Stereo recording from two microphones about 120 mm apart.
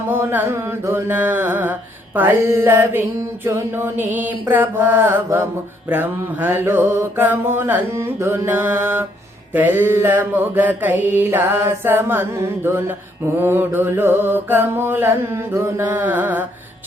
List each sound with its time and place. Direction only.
0.1 s music: 20° right (ahead or behind)
3.4 s mantra: 20° right (ahead or behind)